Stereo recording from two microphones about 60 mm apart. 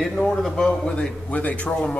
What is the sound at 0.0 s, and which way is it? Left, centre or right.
Speech, centre.